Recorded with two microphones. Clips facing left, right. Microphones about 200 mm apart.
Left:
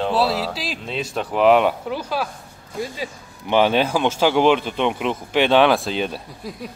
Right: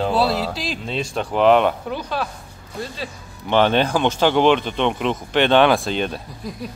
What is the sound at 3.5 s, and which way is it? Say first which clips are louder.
Speech: even; 5° left (ahead or behind).